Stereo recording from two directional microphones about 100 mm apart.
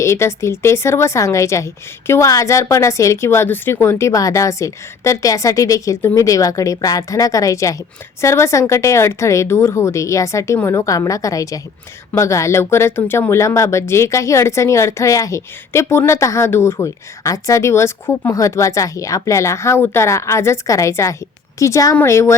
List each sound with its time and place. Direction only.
0.0 s speech: 30° left (ahead or behind)